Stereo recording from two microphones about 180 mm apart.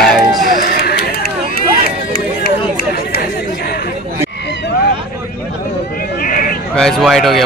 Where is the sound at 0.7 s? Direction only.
60° left (ahead or behind).